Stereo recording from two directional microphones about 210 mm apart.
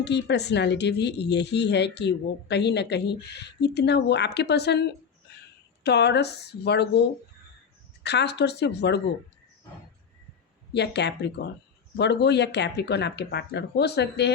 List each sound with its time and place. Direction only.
0.0 s speech: 55° left (ahead or behind)
5.3 s a sound: 50° left (ahead or behind)
5.8 s speech: 50° left (ahead or behind)
8.0 s speech: 55° left (ahead or behind)
10.8 s speech: 55° left (ahead or behind)